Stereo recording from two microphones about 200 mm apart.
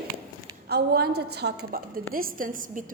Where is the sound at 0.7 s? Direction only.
55° right (ahead or behind).